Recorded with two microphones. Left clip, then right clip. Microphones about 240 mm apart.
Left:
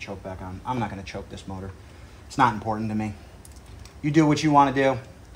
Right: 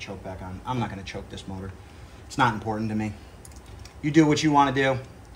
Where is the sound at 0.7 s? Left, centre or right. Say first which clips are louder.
Left 1 dB; left.